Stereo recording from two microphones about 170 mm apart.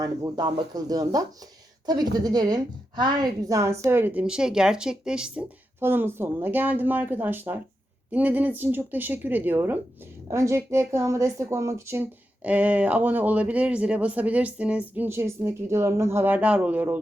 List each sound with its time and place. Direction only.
0.0 s speech: 20° right (ahead or behind)